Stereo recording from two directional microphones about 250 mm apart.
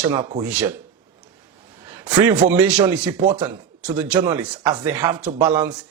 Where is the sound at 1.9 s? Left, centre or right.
Centre.